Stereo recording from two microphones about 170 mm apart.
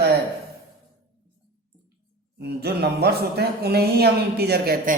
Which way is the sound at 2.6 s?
70° right (ahead or behind).